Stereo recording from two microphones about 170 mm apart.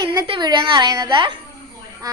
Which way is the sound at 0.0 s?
25° right (ahead or behind).